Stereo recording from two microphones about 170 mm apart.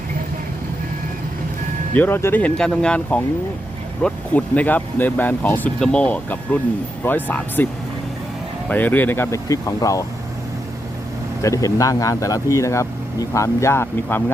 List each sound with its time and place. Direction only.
1.9 s speech: 10° left (ahead or behind)
8.7 s speech: 10° left (ahead or behind)
11.4 s speech: 20° left (ahead or behind)